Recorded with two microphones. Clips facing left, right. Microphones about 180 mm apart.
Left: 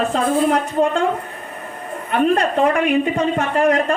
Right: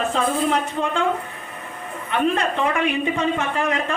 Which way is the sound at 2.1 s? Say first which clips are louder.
Left 4 dB; 45° left (ahead or behind).